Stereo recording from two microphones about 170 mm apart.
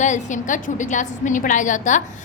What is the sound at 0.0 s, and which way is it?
A woman's voice, 45° left (ahead or behind).